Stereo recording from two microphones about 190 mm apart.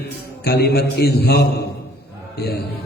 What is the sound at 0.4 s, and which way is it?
Mantra, 60° left (ahead or behind).